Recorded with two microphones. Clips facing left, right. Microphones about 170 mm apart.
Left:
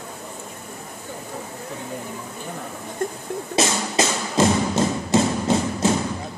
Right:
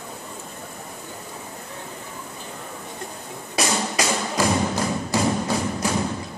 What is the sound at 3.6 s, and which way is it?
Music, 25° left (ahead or behind).